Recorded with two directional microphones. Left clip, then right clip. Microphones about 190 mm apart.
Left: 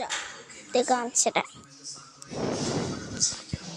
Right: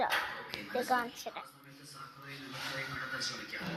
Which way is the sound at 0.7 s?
65° left (ahead or behind).